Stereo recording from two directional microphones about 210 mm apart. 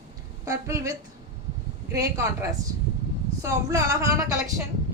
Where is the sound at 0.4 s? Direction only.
15° right (ahead or behind).